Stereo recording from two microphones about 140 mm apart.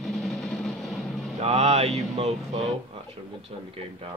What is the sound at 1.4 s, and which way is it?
Speech, 50° right (ahead or behind).